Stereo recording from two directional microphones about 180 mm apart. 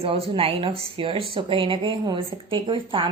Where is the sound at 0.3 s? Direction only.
30° right (ahead or behind).